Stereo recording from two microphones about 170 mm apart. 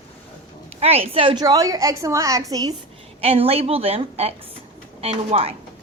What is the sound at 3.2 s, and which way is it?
A woman's voice, 35° right (ahead or behind).